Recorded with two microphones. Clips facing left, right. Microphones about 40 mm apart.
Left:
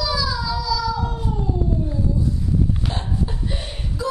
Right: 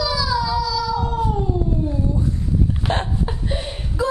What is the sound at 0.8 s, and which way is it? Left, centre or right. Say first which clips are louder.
Baby cry: right 1 dB; right.